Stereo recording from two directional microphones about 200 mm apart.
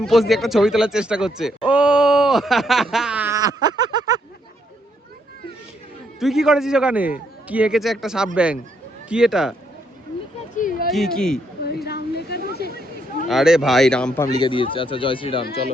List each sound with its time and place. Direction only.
0.0 s speech: centre (ahead or behind); by 4.2 s 20° right (ahead or behind)
6.1 s a man's voice: centre (ahead or behind)
10.5 s a sound: 40° left (ahead or behind)
10.9 s a man's voice: centre (ahead or behind)
11.6 s a sound: 55° left (ahead or behind)
13.2 s a man's voice: centre (ahead or behind)
14.3 s speech: 25° left (ahead or behind)